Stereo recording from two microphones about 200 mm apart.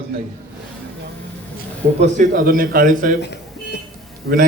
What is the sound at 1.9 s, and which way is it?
A man's voice, 35° right (ahead or behind).